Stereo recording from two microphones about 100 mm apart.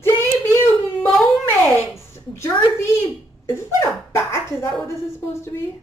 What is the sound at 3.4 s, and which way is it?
Speech, 25° left (ahead or behind).